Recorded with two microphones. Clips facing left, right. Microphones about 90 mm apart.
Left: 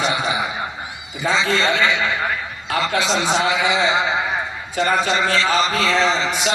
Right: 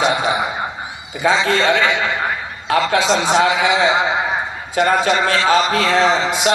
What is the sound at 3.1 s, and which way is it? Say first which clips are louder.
A man's voice: right 4 dB; 40° right (ahead or behind).